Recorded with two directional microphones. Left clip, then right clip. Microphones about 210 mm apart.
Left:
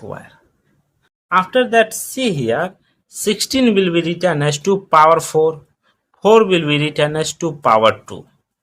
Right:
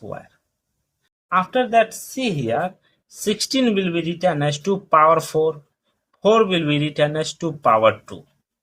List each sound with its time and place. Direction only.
1.3 s speech: 35° left (ahead or behind)